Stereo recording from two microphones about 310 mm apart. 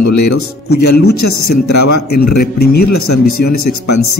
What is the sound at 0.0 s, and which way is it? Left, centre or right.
Speech, left.